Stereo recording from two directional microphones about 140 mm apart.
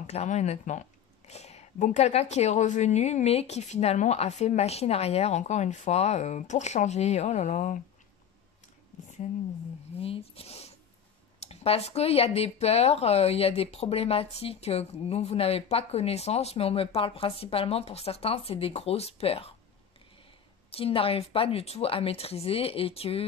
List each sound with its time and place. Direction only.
0.0 s speech: 50° left (ahead or behind)
9.9 s speech: 45° left (ahead or behind)
20.7 s speech: 40° left (ahead or behind)